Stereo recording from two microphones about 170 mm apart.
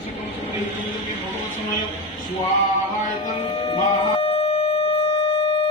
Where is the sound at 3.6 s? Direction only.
35° left (ahead or behind).